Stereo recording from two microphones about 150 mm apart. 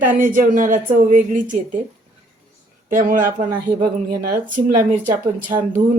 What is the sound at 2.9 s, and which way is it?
Speech, 65° right (ahead or behind).